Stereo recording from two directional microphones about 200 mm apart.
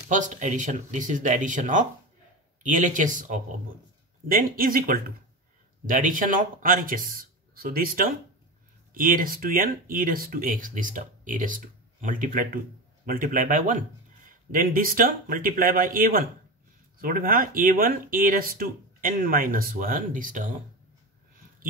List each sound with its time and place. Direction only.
0.1 s speech: 40° right (ahead or behind)